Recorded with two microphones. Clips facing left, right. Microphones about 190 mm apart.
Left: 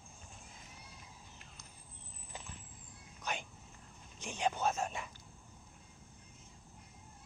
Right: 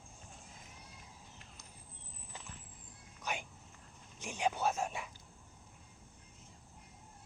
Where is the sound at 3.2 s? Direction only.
10° right (ahead or behind).